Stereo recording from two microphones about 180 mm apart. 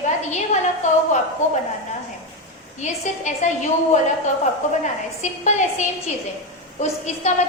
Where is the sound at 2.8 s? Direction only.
40° left (ahead or behind).